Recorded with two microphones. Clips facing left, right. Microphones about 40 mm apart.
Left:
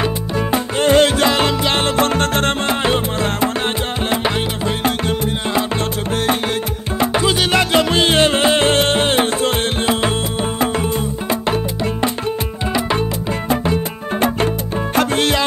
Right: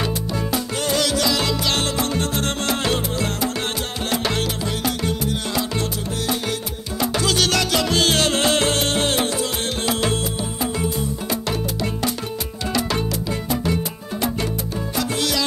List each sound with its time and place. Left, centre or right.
0.0 s music: left
2.0 s music: left
2.6 s music: left
4.8 s music: left
7.0 s music: left
10.6 s music: left
11.4 s music: left
15.0 s music: left